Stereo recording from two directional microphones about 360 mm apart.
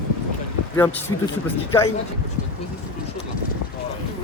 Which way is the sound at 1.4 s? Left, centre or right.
Centre.